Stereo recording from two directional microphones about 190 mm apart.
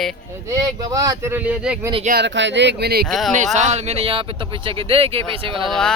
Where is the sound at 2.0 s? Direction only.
60° right (ahead or behind).